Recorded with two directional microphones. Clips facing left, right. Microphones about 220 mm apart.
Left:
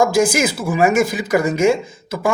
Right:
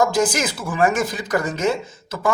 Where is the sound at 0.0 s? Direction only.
10° left (ahead or behind).